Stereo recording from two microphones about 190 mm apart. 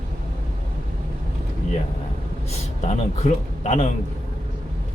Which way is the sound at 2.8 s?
40° left (ahead or behind).